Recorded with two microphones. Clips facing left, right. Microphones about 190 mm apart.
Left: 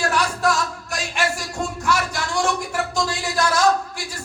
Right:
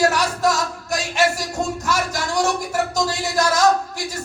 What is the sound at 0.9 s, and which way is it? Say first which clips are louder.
Speech: right 7 dB; 40° right (ahead or behind).